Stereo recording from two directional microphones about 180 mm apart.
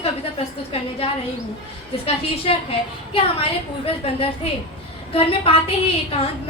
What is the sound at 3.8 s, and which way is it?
A woman's voice, 35° left (ahead or behind).